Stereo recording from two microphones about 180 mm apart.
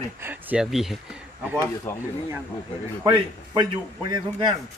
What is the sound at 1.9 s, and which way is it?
Speech, 15° left (ahead or behind).